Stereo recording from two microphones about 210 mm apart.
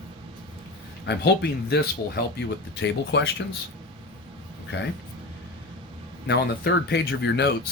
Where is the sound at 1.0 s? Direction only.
50° left (ahead or behind).